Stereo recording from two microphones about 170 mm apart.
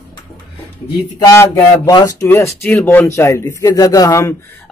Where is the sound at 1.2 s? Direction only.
25° left (ahead or behind).